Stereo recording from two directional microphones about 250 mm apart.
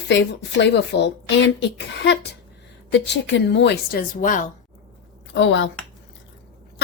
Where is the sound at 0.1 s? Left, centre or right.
Left.